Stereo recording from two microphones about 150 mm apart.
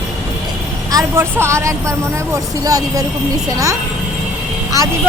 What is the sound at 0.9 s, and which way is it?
Speech, 20° right (ahead or behind).